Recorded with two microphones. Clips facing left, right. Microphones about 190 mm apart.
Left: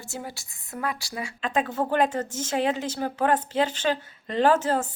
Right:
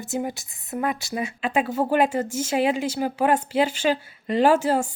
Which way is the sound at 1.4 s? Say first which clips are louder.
Right 2 dB; 10° right (ahead or behind).